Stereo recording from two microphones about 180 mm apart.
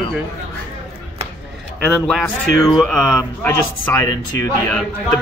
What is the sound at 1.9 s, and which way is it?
Speech, centre (ahead or behind).